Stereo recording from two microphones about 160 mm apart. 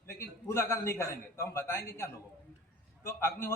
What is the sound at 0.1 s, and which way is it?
A man's voice, 15° left (ahead or behind).